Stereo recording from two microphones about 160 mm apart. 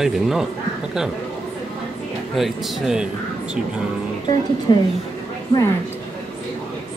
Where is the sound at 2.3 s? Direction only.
Centre (ahead or behind).